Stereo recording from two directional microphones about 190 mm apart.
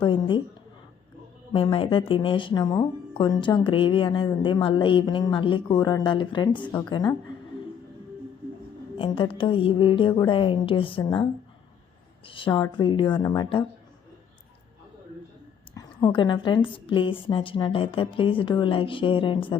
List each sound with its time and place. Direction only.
0.0 s a woman's voice: 25° left (ahead or behind)
1.5 s speech: 25° left (ahead or behind)
6.7 s a woman's voice: 10° left (ahead or behind)
9.0 s speech: 25° left (ahead or behind)
15.7 s speech: 20° left (ahead or behind)